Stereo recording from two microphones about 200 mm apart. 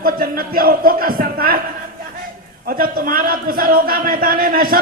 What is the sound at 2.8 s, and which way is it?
A man's voice, 45° right (ahead or behind).